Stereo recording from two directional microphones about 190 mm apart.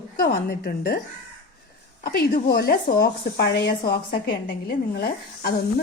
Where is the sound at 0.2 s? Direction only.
55° left (ahead or behind).